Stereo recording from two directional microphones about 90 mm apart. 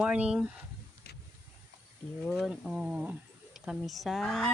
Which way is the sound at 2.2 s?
Centre (ahead or behind).